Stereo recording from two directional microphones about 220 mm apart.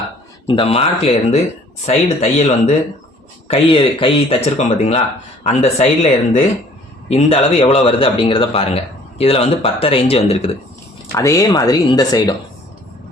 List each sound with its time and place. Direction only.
0.4 s a man's voice: 25° left (ahead or behind)
7.1 s a man's voice: 25° left (ahead or behind)
11.1 s speech: 15° left (ahead or behind)